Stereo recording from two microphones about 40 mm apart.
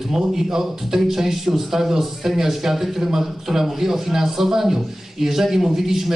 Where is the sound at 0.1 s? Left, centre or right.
Centre.